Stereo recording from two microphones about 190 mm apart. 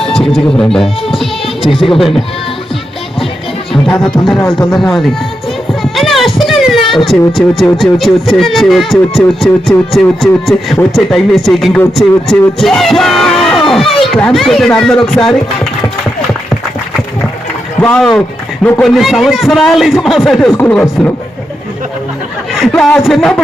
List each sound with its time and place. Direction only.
0.0 s speech: centre (ahead or behind)
1.6 s speech: 25° left (ahead or behind)
1.9 s speech: centre (ahead or behind)
3.8 s speech: 5° left (ahead or behind)
5.8 s music: centre (ahead or behind)
6.9 s speech: centre (ahead or behind)
12.5 s yell: centre (ahead or behind)
13.7 s speech: centre (ahead or behind)
17.7 s speech: 5° left (ahead or behind)
22.7 s speech: 5° left (ahead or behind)